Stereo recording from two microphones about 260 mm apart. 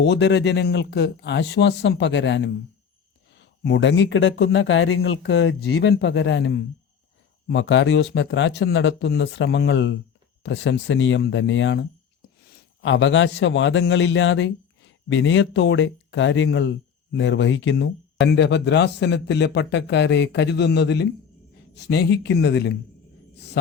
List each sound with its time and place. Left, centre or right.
0.0 s a man's voice: left